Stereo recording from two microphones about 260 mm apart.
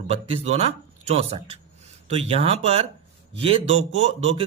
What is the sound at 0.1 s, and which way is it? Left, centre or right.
A man's voice, right.